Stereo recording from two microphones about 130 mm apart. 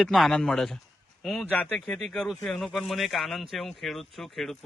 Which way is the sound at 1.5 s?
15° left (ahead or behind).